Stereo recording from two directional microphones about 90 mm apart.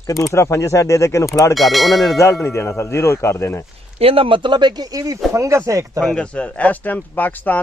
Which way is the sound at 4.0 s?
90° right.